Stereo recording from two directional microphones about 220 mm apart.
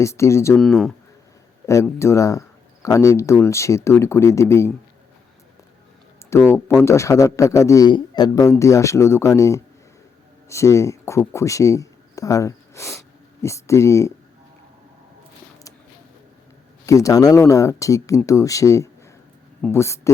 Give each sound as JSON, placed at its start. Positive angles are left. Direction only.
{"t": 0.0, "sound": "a man's voice", "side_deg": 15}
{"t": 0.5, "sound": "speech", "side_deg": 0}
{"t": 1.6, "sound": "a man's voice", "side_deg": 15}
{"t": 6.3, "sound": "a man's voice", "side_deg": 10}
{"t": 16.8, "sound": "a man's voice", "side_deg": 15}